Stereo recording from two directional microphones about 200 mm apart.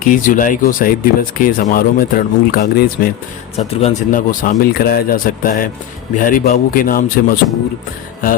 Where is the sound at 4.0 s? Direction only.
40° left (ahead or behind).